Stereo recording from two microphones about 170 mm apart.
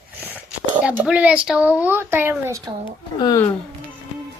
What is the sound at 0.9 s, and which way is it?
Speech, 10° right (ahead or behind).